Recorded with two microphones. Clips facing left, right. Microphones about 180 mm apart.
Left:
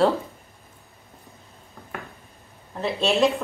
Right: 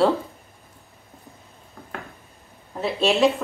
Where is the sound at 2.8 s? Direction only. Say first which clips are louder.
Right 2 dB; centre (ahead or behind).